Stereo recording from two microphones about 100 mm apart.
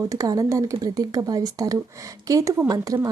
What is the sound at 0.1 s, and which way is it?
A woman's voice, 35° right (ahead or behind).